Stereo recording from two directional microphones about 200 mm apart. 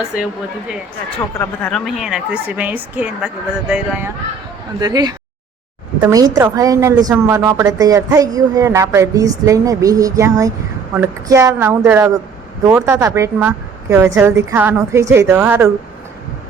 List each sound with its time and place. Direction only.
0.1 s a woman's voice: 5° right (ahead or behind)
1.4 s a woman's voice: 5° left (ahead or behind)
4.8 s a woman's voice: 20° right (ahead or behind)